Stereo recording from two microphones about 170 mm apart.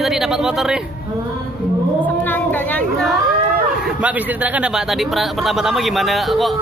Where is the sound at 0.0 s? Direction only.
Centre (ahead or behind).